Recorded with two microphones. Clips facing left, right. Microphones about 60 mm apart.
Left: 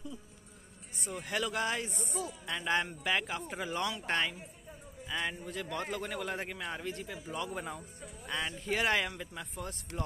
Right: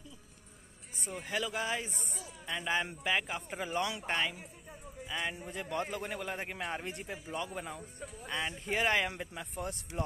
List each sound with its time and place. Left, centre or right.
1.0 s a man's voice: centre
5.4 s a man's voice: right
6.5 s a man's voice: right
7.3 s a man's voice: centre
9.6 s a man's voice: right